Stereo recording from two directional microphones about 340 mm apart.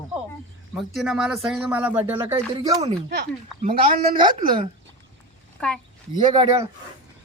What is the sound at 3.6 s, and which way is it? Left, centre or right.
A woman's voice, right.